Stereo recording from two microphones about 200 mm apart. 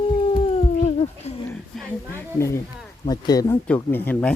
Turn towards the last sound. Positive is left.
turn(degrees=10)  # may be behind; listen again after turning